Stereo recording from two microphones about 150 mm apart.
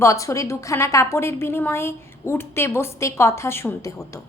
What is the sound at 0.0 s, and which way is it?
A woman's voice, 20° left (ahead or behind).